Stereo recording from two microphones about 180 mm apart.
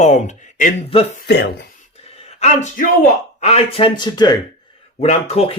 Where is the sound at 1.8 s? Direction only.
35° left (ahead or behind).